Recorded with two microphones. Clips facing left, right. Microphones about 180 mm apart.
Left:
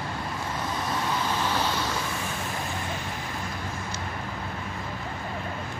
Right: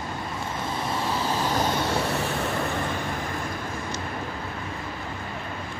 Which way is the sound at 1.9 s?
70° right (ahead or behind).